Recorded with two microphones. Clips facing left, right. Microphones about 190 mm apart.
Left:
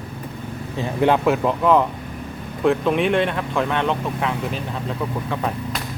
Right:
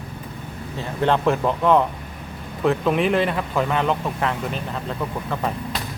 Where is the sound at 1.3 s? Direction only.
Centre (ahead or behind).